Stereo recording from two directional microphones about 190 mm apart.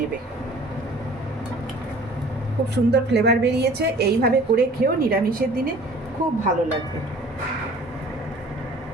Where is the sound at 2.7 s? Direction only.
60° right (ahead or behind).